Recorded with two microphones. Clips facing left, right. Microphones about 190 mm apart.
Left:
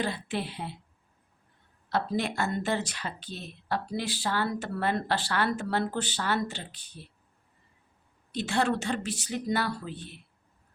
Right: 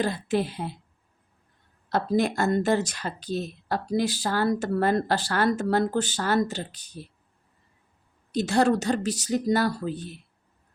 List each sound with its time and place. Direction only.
0.0 s a woman's voice: 45° right (ahead or behind)
1.9 s a woman's voice: 45° right (ahead or behind)
8.3 s speech: 40° right (ahead or behind)